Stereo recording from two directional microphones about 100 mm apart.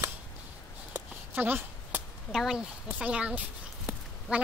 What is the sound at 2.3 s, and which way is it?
Speech, 5° right (ahead or behind).